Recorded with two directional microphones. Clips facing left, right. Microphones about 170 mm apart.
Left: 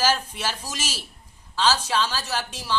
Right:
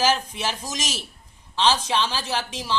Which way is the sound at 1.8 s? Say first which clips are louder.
Right 1 dB; 15° right (ahead or behind).